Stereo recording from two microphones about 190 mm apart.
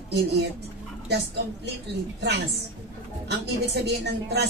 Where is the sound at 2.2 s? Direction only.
60° right (ahead or behind).